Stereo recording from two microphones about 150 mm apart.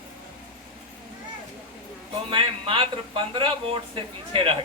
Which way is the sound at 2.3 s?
35° right (ahead or behind).